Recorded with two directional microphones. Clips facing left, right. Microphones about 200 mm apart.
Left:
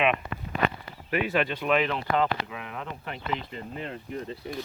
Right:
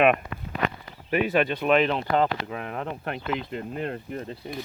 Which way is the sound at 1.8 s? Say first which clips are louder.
Right 3 dB; 35° right (ahead or behind).